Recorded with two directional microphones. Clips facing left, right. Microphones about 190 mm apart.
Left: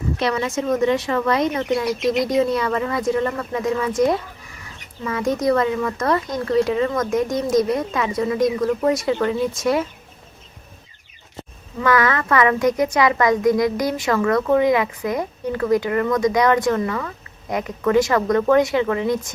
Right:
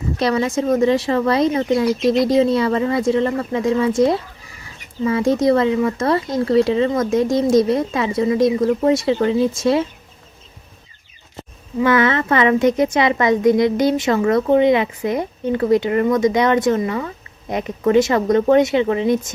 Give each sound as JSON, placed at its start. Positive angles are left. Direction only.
{"t": 0.2, "sound": "a woman's voice", "side_deg": -35}
{"t": 11.8, "sound": "a woman's voice", "side_deg": -25}